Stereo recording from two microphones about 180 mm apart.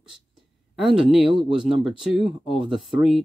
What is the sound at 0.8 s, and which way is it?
Speech, centre (ahead or behind).